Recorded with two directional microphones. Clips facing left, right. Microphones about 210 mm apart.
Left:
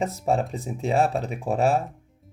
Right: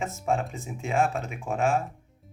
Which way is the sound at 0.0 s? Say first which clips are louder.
Left 4 dB; 35° left (ahead or behind).